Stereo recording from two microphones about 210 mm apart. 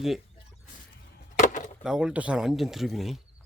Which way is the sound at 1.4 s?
35° left (ahead or behind).